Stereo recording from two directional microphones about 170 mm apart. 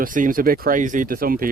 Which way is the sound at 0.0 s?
55° right (ahead or behind).